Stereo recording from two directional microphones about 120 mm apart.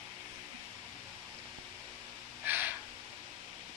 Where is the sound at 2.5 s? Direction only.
15° right (ahead or behind).